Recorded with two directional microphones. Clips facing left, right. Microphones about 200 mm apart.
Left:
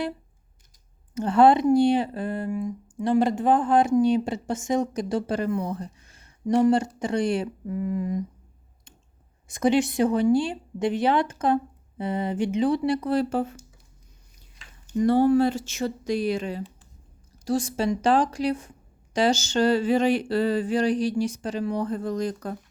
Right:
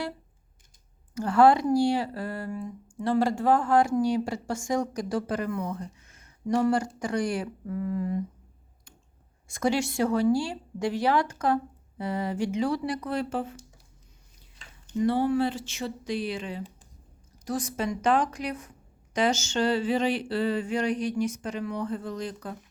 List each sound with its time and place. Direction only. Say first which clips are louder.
1.1 s speech: left 2 dB; 20° left (ahead or behind)
9.5 s speech: left 5 dB; 20° left (ahead or behind); by 13.6 s 40° left (ahead or behind)
15.0 s speech: left 5 dB; 45° left (ahead or behind)
17.4 s a sound: left 5 dB; 30° left (ahead or behind)